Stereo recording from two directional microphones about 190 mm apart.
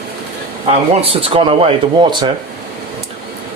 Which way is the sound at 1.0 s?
30° right (ahead or behind).